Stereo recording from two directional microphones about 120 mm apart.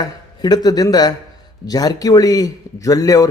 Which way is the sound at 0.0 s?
35° left (ahead or behind).